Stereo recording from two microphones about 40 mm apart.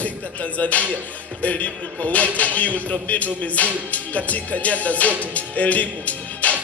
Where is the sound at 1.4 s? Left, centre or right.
Left.